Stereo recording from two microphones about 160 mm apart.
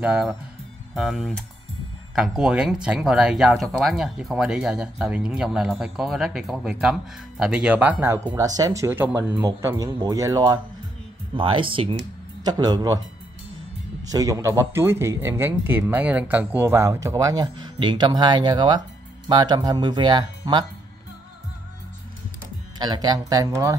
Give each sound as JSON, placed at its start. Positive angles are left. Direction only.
{"t": 0.0, "sound": "speech", "side_deg": -5}
{"t": 8.4, "sound": "speech", "side_deg": -25}
{"t": 14.1, "sound": "speech", "side_deg": -20}
{"t": 22.8, "sound": "speech", "side_deg": -25}